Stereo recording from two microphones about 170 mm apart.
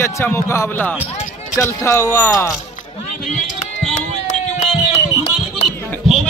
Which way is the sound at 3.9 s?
45° left (ahead or behind).